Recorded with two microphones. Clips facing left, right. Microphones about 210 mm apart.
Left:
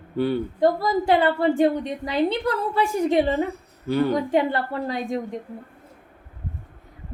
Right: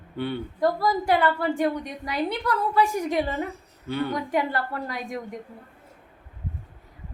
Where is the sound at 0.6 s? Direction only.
25° left (ahead or behind).